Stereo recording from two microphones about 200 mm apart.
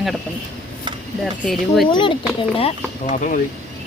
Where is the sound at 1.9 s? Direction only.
25° left (ahead or behind).